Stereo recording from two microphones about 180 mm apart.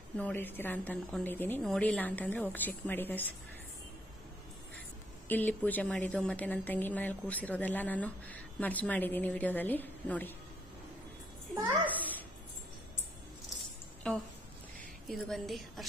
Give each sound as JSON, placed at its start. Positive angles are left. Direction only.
{"t": 0.2, "sound": "a woman's voice", "side_deg": 10}
{"t": 5.3, "sound": "a woman's voice", "side_deg": 10}
{"t": 11.8, "sound": "a sound", "side_deg": 10}
{"t": 14.0, "sound": "a woman's voice", "side_deg": 5}